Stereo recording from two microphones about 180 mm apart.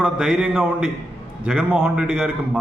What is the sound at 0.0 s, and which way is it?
A man's voice, 5° right (ahead or behind).